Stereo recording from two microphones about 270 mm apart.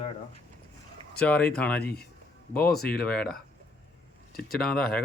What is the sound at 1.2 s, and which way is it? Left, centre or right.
Speech, centre.